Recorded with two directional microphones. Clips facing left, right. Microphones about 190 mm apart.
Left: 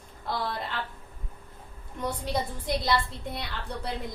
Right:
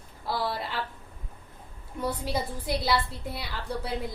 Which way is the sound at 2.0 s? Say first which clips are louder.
Even; 5° right (ahead or behind).